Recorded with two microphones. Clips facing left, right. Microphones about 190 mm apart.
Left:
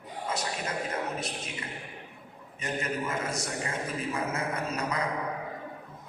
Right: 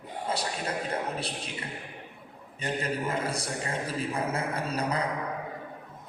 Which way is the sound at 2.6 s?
30° right (ahead or behind).